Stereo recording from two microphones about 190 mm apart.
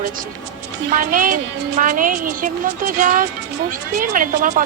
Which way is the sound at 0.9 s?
45° right (ahead or behind).